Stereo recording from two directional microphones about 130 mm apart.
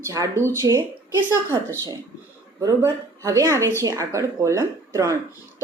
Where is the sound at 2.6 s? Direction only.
25° right (ahead or behind).